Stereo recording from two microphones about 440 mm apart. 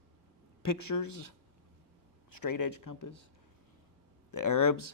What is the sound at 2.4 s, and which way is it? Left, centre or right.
Speech, left.